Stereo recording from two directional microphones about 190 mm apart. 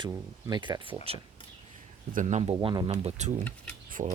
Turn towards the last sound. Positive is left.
turn(degrees=-35)  # may be behind; listen again after turning